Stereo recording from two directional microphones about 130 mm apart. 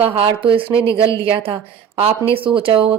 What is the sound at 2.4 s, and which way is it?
Speech, 45° right (ahead or behind).